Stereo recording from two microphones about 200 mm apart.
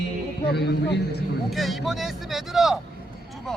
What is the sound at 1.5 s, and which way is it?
Speech, centre (ahead or behind).